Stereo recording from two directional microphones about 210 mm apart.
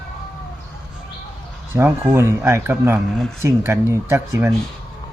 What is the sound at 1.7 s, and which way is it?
Speech, 10° right (ahead or behind).